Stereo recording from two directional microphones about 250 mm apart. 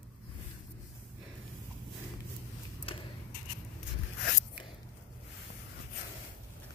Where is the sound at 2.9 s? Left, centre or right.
Left.